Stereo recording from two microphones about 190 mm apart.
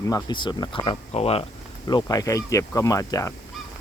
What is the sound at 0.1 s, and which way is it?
Speech, 25° left (ahead or behind).